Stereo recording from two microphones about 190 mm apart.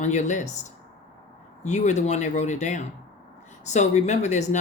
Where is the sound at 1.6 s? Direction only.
40° left (ahead or behind).